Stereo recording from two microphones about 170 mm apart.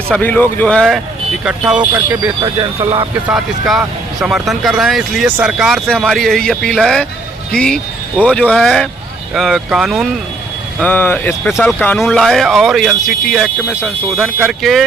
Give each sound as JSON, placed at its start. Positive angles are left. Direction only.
{"t": 0.1, "sound": "speech", "side_deg": 10}
{"t": 1.9, "sound": "speech", "side_deg": -20}
{"t": 2.4, "sound": "speech", "side_deg": -30}
{"t": 3.2, "sound": "speech", "side_deg": 0}
{"t": 10.8, "sound": "speech", "side_deg": 10}
{"t": 11.4, "sound": "speech", "side_deg": 0}
{"t": 14.6, "sound": "speech", "side_deg": 0}